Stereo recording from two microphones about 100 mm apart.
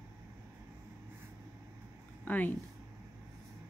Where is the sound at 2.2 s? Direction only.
15° left (ahead or behind).